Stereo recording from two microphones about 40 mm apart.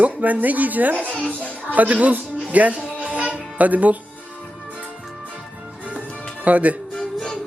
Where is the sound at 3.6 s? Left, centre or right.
Right.